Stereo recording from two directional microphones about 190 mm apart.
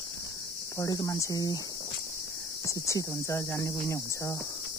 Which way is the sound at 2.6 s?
15° left (ahead or behind).